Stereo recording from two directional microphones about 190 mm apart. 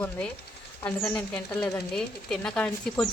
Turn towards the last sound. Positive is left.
turn(degrees=5)  # may be behind; listen again after turning